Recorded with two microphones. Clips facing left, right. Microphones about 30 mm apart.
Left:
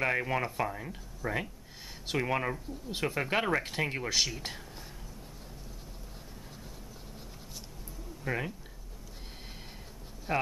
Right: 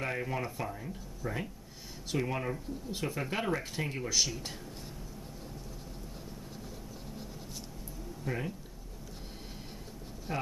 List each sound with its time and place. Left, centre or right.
0.0 s speech: left
8.2 s speech: left
10.3 s speech: left